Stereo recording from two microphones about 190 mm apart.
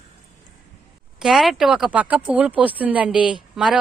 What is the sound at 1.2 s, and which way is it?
Speech, centre (ahead or behind).